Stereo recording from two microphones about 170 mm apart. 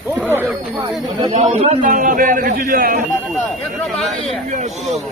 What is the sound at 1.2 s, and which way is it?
A man's voice, 40° right (ahead or behind).